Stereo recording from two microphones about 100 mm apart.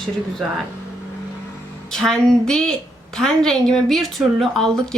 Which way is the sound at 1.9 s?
5° left (ahead or behind).